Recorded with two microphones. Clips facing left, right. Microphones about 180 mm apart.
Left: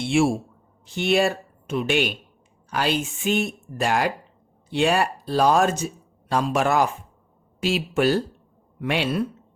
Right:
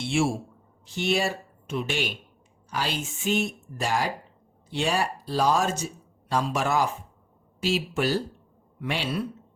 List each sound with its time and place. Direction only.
0.0 s a man's voice: 55° left (ahead or behind)